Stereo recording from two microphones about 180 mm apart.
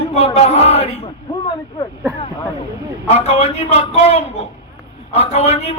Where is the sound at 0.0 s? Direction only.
35° left (ahead or behind).